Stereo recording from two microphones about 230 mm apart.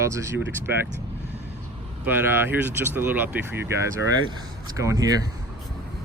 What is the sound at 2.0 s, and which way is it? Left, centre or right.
Speech, centre.